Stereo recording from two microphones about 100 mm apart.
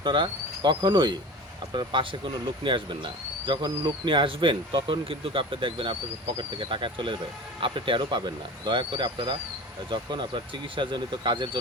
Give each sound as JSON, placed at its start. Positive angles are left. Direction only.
{"t": 0.0, "sound": "speech", "side_deg": -50}